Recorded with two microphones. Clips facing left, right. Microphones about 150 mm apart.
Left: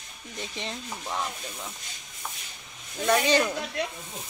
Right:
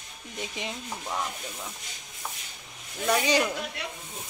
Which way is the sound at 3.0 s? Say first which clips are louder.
Left 2 dB; 10° right (ahead or behind).